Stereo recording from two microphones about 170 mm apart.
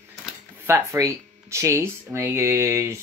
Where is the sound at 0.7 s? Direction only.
20° right (ahead or behind).